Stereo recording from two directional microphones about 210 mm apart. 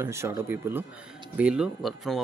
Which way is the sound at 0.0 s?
15° right (ahead or behind).